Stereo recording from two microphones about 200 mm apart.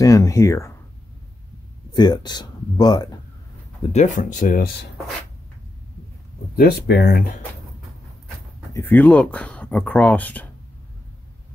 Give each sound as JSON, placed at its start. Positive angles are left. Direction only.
{"t": 0.0, "sound": "speech", "side_deg": 15}
{"t": 1.9, "sound": "speech", "side_deg": 20}
{"t": 3.8, "sound": "speech", "side_deg": 35}
{"t": 6.5, "sound": "speech", "side_deg": 50}
{"t": 8.7, "sound": "speech", "side_deg": 10}